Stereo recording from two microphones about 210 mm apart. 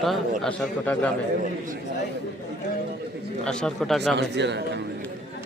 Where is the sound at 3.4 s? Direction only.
Centre (ahead or behind).